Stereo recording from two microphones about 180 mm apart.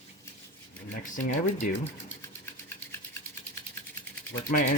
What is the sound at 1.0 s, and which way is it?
Speech, 45° left (ahead or behind).